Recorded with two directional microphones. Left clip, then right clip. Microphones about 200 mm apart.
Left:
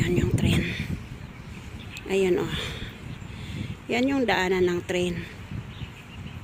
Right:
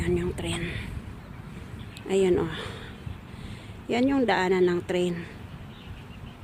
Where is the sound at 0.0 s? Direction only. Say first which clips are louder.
Left 2 dB; centre (ahead or behind).